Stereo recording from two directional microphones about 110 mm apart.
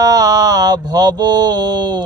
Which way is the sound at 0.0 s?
35° right (ahead or behind).